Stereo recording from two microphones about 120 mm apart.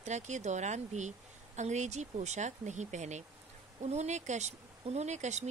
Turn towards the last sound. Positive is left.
turn(degrees=-70)  # may be behind; listen again after turning